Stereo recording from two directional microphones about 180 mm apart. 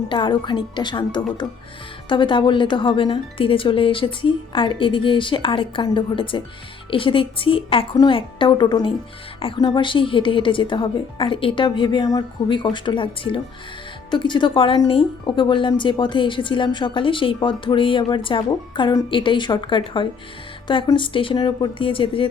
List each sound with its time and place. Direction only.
0.1 s a woman's voice: 25° left (ahead or behind)